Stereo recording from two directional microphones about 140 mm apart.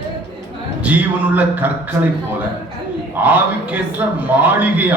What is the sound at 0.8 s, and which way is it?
Speech, 10° right (ahead or behind).